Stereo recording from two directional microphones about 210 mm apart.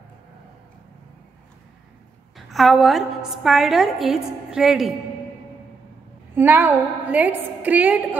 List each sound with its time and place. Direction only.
2.3 s a woman's voice: centre (ahead or behind)
6.3 s a woman's voice: 10° right (ahead or behind)